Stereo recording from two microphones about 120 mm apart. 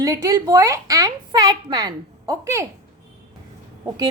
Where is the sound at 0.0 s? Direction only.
25° right (ahead or behind).